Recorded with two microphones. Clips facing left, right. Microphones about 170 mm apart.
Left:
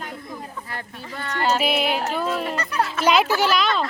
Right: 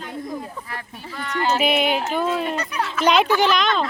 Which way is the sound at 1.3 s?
40° left (ahead or behind).